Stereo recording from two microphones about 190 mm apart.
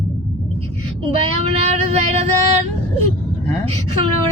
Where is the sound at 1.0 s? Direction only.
30° right (ahead or behind).